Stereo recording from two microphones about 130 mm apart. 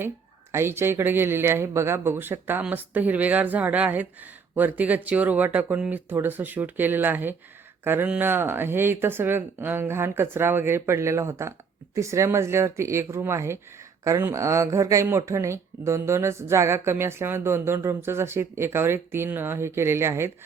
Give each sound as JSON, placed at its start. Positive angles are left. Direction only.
{"t": 0.5, "sound": "speech", "side_deg": -20}